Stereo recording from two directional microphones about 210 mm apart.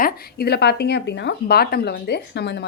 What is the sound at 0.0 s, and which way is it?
A woman's voice, 50° left (ahead or behind).